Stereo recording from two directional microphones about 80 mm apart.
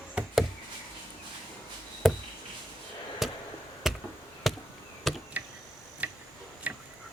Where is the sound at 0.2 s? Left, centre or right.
Centre.